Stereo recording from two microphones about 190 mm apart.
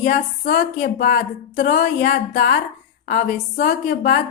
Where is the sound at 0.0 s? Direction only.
55° left (ahead or behind).